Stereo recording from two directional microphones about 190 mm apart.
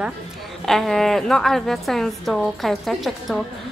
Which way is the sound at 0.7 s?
Centre (ahead or behind).